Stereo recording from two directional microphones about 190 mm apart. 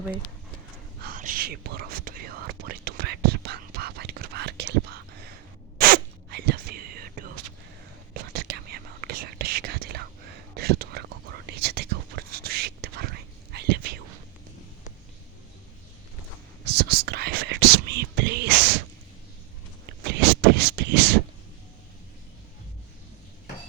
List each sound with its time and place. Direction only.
1.0 s whispering: 45° right (ahead or behind)
16.6 s whispering: 55° right (ahead or behind)
20.1 s a sound: 60° right (ahead or behind)